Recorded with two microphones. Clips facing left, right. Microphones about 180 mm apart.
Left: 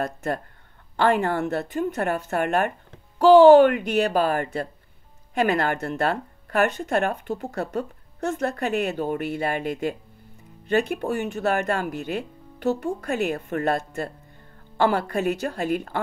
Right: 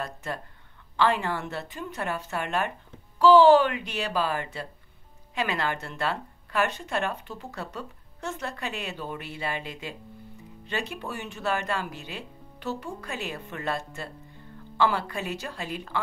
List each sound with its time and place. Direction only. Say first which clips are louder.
0.0 s speech: left 7 dB; 50° left (ahead or behind)